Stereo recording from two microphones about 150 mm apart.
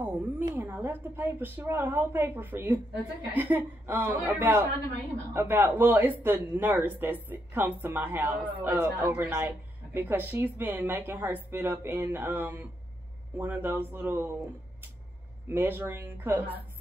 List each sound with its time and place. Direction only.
0.6 s speech: 15° right (ahead or behind)
15.4 s speech: 15° right (ahead or behind)